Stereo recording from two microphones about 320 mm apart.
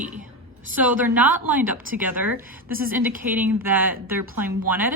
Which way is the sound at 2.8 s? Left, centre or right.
Right.